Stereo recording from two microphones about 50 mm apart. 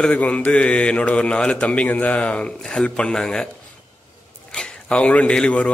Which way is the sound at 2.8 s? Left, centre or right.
Centre.